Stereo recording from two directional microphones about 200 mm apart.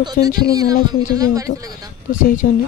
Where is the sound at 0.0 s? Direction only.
20° right (ahead or behind).